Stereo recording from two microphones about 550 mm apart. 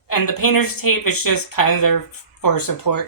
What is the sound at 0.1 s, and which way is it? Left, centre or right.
Speech, left.